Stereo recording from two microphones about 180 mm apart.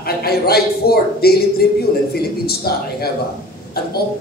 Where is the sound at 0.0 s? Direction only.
60° left (ahead or behind).